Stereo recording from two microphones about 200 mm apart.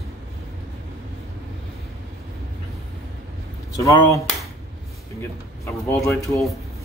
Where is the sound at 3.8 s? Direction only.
15° left (ahead or behind).